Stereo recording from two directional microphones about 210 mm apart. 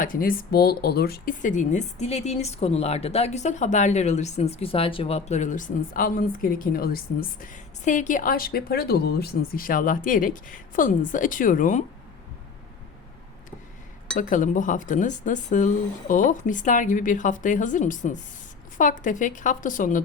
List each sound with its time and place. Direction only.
0.0 s speech: 40° left (ahead or behind)
14.2 s speech: 40° left (ahead or behind)